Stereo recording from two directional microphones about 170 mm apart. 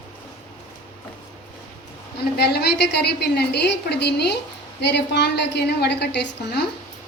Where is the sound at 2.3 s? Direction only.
70° left (ahead or behind).